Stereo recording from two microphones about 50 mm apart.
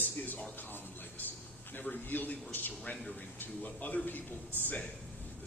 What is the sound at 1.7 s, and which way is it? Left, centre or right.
A man's voice, left.